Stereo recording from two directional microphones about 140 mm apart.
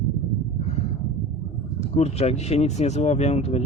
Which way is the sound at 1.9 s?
50° left (ahead or behind).